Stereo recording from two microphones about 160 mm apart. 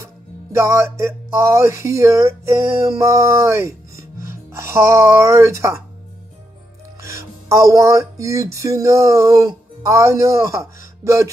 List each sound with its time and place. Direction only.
0.0 s music: 20° right (ahead or behind)
4.5 s speech: 15° right (ahead or behind)
7.0 s music: 20° right (ahead or behind)